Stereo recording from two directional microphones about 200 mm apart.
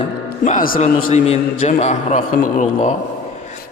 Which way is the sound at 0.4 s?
45° left (ahead or behind).